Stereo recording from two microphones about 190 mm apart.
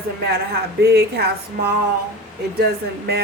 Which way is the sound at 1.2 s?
55° right (ahead or behind).